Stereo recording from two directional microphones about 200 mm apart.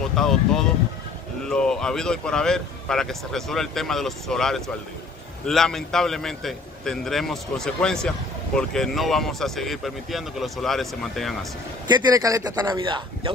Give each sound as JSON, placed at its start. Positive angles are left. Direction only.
{"t": 0.1, "sound": "speech", "side_deg": 0}
{"t": 11.9, "sound": "speech", "side_deg": -15}